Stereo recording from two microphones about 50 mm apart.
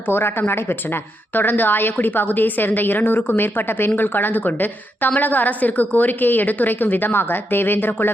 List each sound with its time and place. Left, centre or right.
0.1 s a woman's voice: left